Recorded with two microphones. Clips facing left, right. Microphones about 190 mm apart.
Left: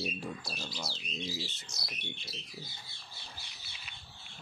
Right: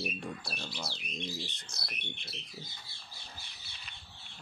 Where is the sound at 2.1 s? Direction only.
60° right (ahead or behind).